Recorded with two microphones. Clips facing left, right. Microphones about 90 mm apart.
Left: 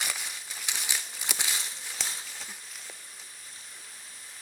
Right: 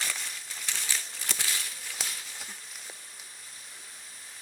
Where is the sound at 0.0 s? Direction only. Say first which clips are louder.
Left 1 dB; 10° left (ahead or behind).